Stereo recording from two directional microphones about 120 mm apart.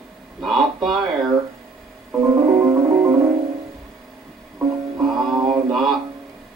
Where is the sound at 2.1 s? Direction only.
25° right (ahead or behind).